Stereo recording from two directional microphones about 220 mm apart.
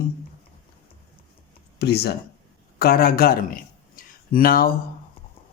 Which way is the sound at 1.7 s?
50° left (ahead or behind).